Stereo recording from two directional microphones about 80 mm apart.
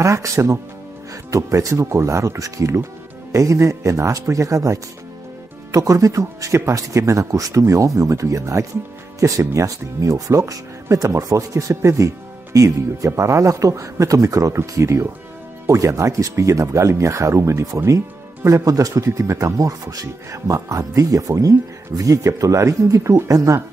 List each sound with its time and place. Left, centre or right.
0.0 s speech: right